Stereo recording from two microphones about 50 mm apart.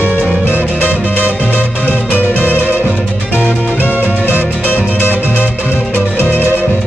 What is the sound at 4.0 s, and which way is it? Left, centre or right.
Music, right.